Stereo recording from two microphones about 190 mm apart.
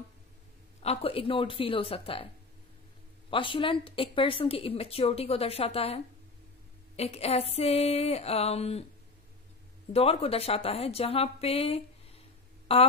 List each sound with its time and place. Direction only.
0.8 s speech: 30° left (ahead or behind)
3.3 s a woman's voice: 25° left (ahead or behind)
9.9 s a woman's voice: 30° left (ahead or behind)